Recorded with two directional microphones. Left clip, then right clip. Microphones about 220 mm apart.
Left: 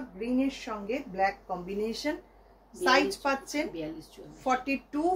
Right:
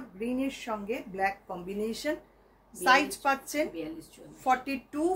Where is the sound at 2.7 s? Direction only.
15° right (ahead or behind).